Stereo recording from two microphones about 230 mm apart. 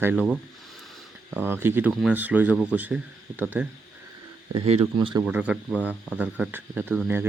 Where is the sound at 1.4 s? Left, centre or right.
Centre.